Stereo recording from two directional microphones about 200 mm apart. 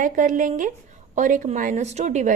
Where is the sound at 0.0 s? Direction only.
40° right (ahead or behind).